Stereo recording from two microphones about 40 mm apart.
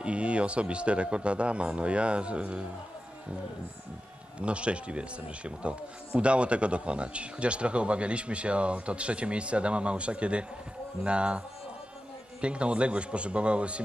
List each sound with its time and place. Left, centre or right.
0.0 s speech: right
4.4 s speech: right
6.1 s speech: right